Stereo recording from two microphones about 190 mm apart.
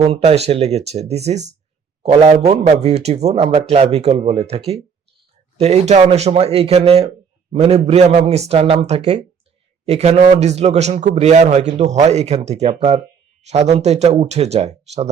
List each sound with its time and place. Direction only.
0.0 s a man's voice: 35° right (ahead or behind)